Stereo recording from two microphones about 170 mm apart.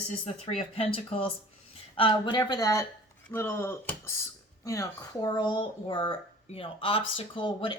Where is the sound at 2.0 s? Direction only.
30° left (ahead or behind).